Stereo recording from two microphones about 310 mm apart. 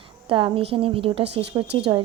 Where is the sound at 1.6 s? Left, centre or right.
Right.